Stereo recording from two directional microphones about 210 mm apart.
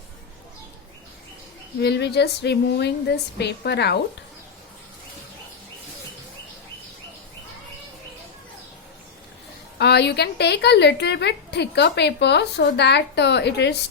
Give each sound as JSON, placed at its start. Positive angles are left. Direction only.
{"t": 1.8, "sound": "a woman's voice", "side_deg": 50}
{"t": 9.7, "sound": "a woman's voice", "side_deg": 55}